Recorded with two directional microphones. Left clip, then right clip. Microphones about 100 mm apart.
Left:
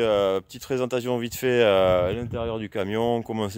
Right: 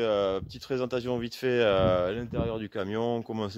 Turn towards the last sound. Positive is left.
turn(degrees=40)  # may be behind; listen again after turning